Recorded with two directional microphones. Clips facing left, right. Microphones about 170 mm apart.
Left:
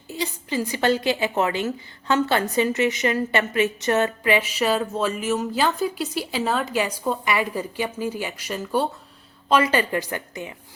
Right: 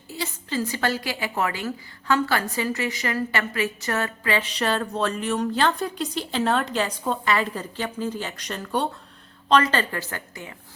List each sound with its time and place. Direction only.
0.1 s a woman's voice: 15° left (ahead or behind)
4.4 s a woman's voice: 5° left (ahead or behind)